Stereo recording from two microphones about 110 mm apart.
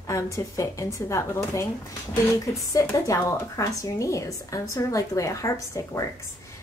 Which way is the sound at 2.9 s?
30° left (ahead or behind).